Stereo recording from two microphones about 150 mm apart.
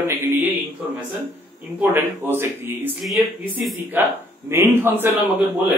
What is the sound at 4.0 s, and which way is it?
A man's voice, 15° right (ahead or behind).